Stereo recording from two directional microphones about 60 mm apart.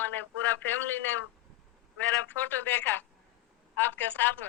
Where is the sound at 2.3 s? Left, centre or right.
Left.